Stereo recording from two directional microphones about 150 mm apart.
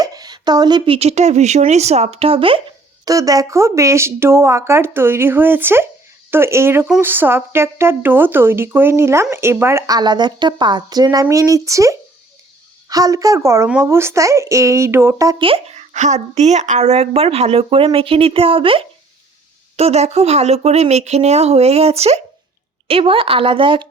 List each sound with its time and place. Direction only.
0.0 s a sound: 25° right (ahead or behind)
0.9 s speech: 45° right (ahead or behind); by 15.4 s 20° right (ahead or behind)
15.4 s speech: 35° right (ahead or behind)